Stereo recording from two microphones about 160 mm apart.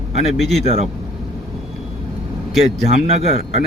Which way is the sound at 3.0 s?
40° right (ahead or behind).